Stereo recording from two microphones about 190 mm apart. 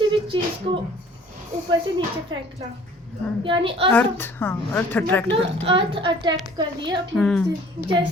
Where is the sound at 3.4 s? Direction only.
25° right (ahead or behind).